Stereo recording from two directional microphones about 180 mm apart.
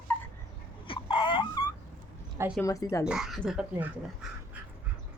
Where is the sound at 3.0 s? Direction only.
Centre (ahead or behind).